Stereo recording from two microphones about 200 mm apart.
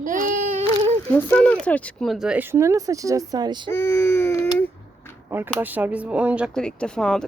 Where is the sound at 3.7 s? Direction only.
10° left (ahead or behind).